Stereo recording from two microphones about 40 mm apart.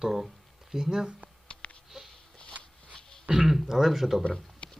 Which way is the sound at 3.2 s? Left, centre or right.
Centre.